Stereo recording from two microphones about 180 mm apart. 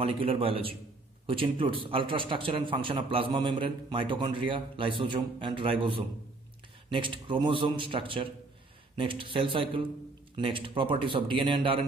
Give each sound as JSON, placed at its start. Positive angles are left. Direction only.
{"t": 0.0, "sound": "a man's voice", "side_deg": -30}